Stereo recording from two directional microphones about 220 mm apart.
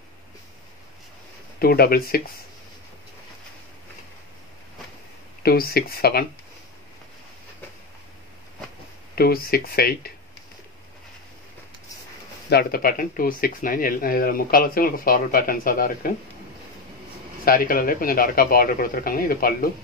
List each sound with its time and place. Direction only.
1.6 s speech: 45° left (ahead or behind)
5.4 s speech: 45° left (ahead or behind)
9.1 s speech: 45° left (ahead or behind)
12.4 s speech: 45° left (ahead or behind)
17.5 s speech: 40° left (ahead or behind)